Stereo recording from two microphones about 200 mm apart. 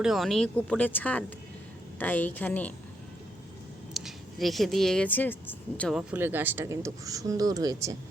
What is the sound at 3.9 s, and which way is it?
Speech, centre (ahead or behind).